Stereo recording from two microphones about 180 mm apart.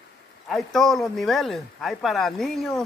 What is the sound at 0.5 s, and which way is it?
Speech, centre (ahead or behind).